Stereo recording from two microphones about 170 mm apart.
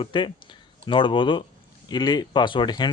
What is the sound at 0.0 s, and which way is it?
Speech, 30° left (ahead or behind).